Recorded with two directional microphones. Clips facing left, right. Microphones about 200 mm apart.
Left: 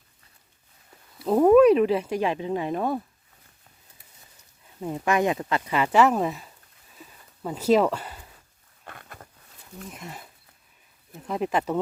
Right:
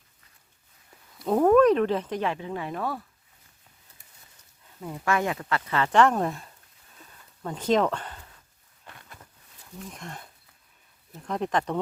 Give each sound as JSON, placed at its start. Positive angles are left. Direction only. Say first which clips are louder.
{"t": 1.2, "sound": "speech", "louder": "left 3 dB", "side_deg": 5}
{"t": 4.8, "sound": "speech", "louder": "left 3 dB", "side_deg": 20}
{"t": 7.0, "sound": "a sound", "louder": "left 2 dB", "side_deg": 5}
{"t": 8.9, "sound": "a sound", "louder": "left 5 dB", "side_deg": 55}
{"t": 9.9, "sound": "speech", "louder": "left 1 dB", "side_deg": 5}
{"t": 11.3, "sound": "speech", "louder": "left 2 dB", "side_deg": 5}